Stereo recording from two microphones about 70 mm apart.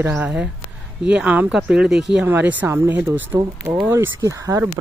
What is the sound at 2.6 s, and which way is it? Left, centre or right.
Speech, right.